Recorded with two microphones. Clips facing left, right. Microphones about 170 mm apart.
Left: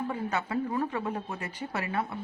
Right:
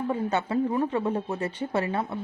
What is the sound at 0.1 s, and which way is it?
Speech, 25° right (ahead or behind).